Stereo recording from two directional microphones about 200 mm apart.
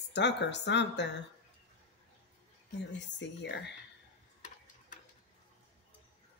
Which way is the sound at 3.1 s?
60° left (ahead or behind).